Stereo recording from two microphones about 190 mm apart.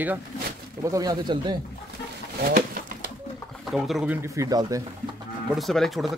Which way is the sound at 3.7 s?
Centre (ahead or behind).